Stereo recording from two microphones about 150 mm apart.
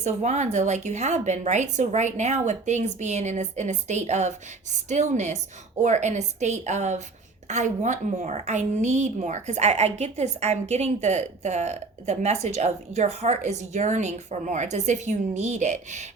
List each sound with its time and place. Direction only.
0.0 s a woman's voice: 50° right (ahead or behind)